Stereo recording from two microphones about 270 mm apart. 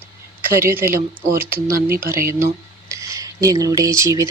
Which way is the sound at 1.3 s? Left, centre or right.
Right.